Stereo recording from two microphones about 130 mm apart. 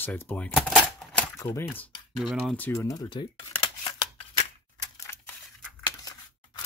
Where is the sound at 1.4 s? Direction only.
25° left (ahead or behind).